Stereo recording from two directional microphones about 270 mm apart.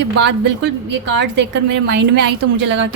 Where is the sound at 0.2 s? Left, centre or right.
Right.